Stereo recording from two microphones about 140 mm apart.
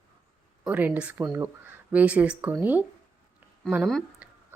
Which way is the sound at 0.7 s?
10° right (ahead or behind).